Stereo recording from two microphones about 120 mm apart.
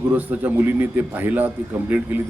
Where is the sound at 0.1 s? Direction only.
15° right (ahead or behind).